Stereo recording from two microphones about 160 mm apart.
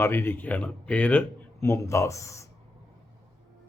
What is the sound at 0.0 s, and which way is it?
Speech, 15° left (ahead or behind).